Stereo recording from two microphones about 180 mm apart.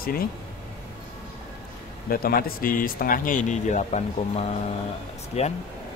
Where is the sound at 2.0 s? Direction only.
55° left (ahead or behind); by 5.5 s 35° left (ahead or behind).